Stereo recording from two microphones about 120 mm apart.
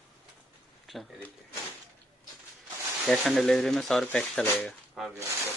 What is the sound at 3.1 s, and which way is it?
Speech, centre (ahead or behind).